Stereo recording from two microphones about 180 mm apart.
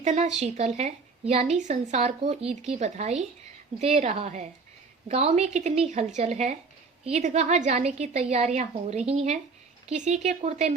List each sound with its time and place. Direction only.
0.0 s a woman's voice: 40° right (ahead or behind)